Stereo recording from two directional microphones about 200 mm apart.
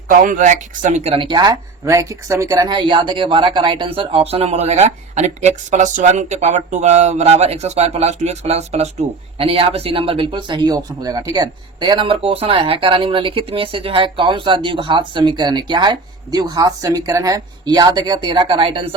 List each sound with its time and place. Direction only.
0.1 s speech: 40° right (ahead or behind); by 18.9 s 25° right (ahead or behind)